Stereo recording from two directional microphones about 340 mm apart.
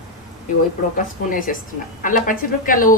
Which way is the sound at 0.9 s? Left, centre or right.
Left.